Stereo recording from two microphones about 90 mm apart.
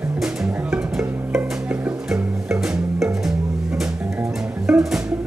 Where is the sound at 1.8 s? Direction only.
15° right (ahead or behind).